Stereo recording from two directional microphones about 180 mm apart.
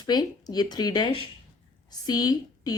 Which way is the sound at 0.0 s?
20° left (ahead or behind).